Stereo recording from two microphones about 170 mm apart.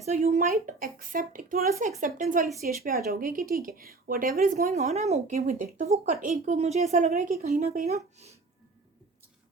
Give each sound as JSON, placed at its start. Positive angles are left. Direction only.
{"t": 0.0, "sound": "speech", "side_deg": -40}
{"t": 0.6, "sound": "speech", "side_deg": -55}
{"t": 2.6, "sound": "speech", "side_deg": -60}
{"t": 5.4, "sound": "speech", "side_deg": -50}
{"t": 7.1, "sound": "speech", "side_deg": -55}